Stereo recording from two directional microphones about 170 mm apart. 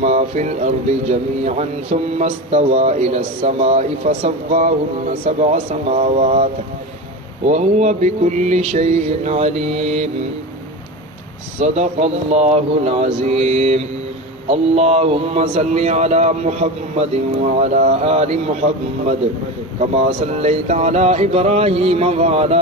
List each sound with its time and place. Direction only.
0.0 s speech: 40° right (ahead or behind)
11.6 s speech: 40° right (ahead or behind)